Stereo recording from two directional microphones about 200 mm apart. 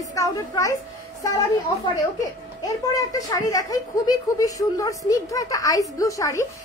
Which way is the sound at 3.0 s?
15° left (ahead or behind).